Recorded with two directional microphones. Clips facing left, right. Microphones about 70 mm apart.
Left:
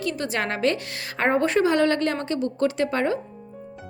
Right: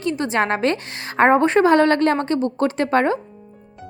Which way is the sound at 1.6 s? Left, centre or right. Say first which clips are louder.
Right 6 dB; right.